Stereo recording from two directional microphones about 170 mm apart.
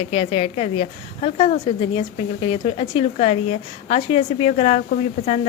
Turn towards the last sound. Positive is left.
turn(degrees=45)  # may be behind; listen again after turning